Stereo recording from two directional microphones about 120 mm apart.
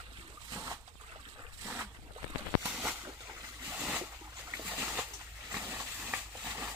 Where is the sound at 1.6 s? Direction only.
5° right (ahead or behind).